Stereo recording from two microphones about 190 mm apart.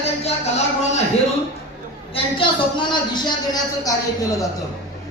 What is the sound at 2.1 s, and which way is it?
Music, 25° left (ahead or behind).